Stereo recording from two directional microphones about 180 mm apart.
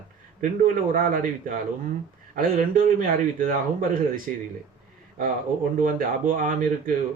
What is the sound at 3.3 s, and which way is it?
Speech, 50° right (ahead or behind).